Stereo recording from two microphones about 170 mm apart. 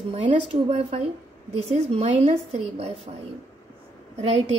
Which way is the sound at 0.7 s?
35° right (ahead or behind).